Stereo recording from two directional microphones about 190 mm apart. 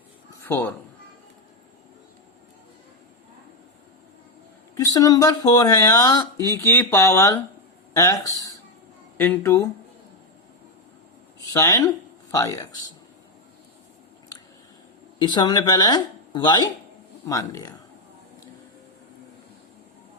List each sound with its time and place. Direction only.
0.4 s speech: 10° left (ahead or behind)
4.9 s speech: 20° left (ahead or behind)
11.5 s speech: 15° left (ahead or behind)
15.3 s speech: 20° left (ahead or behind)